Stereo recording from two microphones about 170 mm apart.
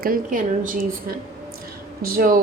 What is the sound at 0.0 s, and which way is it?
A woman's voice, 55° right (ahead or behind).